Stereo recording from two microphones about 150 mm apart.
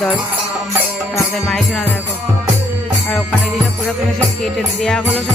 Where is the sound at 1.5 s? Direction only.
5° left (ahead or behind).